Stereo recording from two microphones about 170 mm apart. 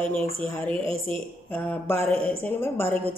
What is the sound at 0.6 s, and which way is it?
Speech, 30° right (ahead or behind).